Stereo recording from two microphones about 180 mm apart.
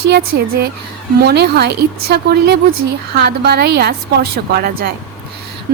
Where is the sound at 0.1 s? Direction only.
60° right (ahead or behind).